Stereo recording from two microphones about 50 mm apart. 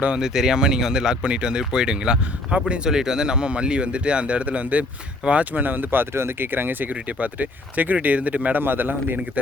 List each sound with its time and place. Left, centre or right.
0.2 s a man's voice: centre; by 8.6 s right
8.6 s a man's voice: right